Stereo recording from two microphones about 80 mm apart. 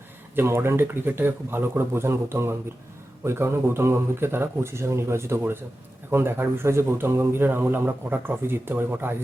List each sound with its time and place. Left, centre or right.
0.3 s speech: right